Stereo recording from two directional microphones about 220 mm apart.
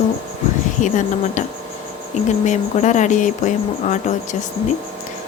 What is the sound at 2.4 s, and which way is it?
Speech, 35° left (ahead or behind).